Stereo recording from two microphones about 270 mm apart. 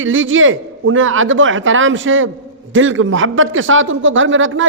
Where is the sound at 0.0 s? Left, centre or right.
Right.